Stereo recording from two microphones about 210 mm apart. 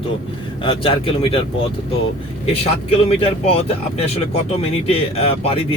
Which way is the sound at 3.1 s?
30° left (ahead or behind).